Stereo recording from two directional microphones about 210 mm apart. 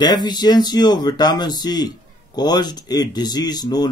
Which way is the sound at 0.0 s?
20° left (ahead or behind).